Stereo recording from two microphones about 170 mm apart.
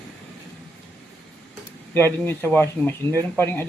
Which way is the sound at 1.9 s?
15° left (ahead or behind).